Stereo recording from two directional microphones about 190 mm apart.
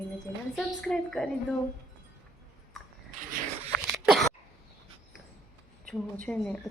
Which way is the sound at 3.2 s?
45° right (ahead or behind).